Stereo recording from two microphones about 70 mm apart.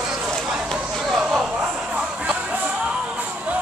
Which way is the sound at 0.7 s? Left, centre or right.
Centre.